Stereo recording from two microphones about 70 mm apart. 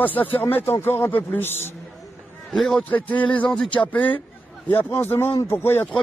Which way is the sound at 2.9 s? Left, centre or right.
Left.